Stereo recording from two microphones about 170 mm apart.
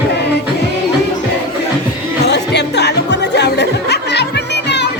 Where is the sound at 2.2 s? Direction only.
80° left.